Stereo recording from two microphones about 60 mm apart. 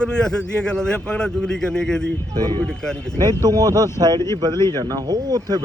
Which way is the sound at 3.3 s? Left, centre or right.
Right.